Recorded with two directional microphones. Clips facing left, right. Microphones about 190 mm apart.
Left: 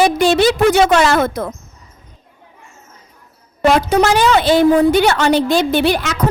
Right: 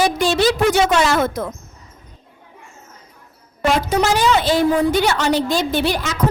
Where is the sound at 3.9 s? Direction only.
60° left (ahead or behind).